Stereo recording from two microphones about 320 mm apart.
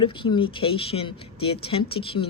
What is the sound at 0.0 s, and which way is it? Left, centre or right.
Speech, centre.